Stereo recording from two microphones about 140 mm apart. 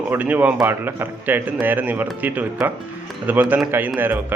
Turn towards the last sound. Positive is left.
turn(degrees=-15)  # may be behind; listen again after turning